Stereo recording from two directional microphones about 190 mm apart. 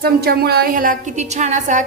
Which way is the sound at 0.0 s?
55° right (ahead or behind).